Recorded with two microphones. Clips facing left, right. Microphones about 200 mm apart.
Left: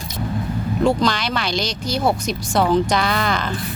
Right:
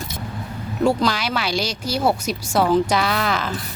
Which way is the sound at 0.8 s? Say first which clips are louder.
Even; 5° right (ahead or behind).